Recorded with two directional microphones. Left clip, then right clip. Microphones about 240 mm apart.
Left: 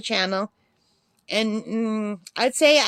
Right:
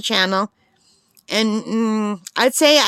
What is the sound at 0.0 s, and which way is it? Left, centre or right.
A woman's voice, right.